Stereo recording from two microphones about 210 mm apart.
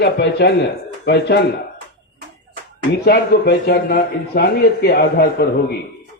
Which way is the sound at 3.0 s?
50° left (ahead or behind).